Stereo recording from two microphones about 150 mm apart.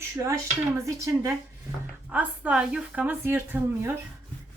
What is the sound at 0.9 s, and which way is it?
Speech, 20° right (ahead or behind).